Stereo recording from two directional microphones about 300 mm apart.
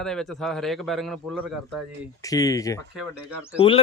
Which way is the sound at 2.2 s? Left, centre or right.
Centre.